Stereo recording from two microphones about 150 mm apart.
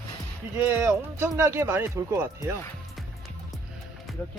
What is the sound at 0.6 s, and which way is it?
Speech, 15° right (ahead or behind).